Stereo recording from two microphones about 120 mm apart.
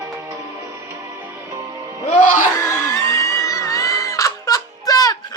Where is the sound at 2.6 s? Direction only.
25° left (ahead or behind).